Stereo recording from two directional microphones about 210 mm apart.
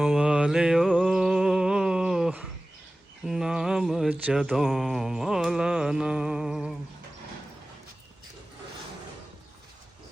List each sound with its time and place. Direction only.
0.0 s music: 5° right (ahead or behind)
3.2 s mantra: centre (ahead or behind)